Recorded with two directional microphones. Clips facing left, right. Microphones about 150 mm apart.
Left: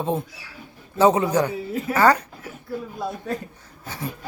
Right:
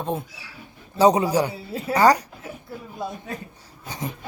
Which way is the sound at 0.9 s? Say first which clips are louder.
Even; 15° right (ahead or behind).